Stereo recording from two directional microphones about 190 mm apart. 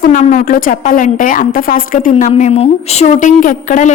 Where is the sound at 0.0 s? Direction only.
40° left (ahead or behind).